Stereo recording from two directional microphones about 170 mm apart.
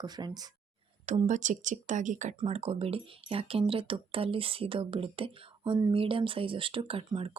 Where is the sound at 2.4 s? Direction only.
35° right (ahead or behind).